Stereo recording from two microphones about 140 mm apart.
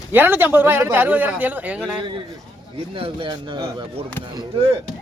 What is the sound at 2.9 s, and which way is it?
Speech, 40° right (ahead or behind).